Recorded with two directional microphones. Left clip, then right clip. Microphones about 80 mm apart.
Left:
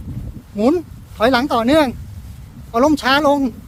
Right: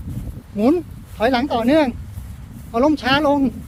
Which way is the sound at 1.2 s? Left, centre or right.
Left.